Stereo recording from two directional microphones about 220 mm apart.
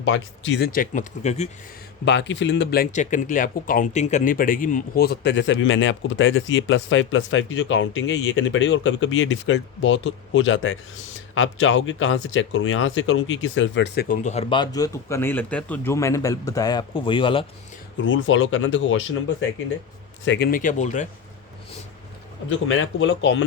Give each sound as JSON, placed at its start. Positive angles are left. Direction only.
{"t": 0.0, "sound": "speech", "side_deg": 55}
{"t": 0.7, "sound": "speech", "side_deg": 35}
{"t": 2.0, "sound": "speech", "side_deg": 55}
{"t": 14.3, "sound": "a man's voice", "side_deg": 25}
{"t": 17.9, "sound": "speech", "side_deg": 60}
{"t": 20.5, "sound": "speech", "side_deg": 35}
{"t": 22.4, "sound": "speech", "side_deg": 60}